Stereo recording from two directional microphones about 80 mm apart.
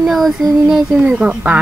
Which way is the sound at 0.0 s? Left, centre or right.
Centre.